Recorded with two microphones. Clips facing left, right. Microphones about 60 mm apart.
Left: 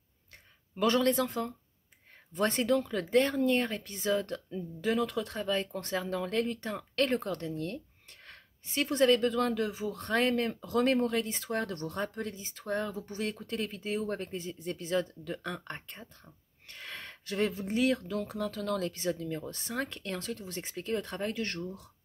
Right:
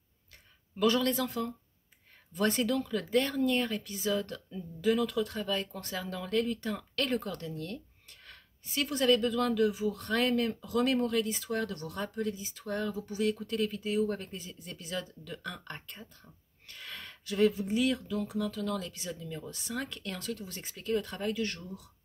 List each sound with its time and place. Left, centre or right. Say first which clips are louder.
0.7 s speech: left 1 dB; left
16.6 s a sound: left 1 dB; left
17.6 s speech: left 1 dB; left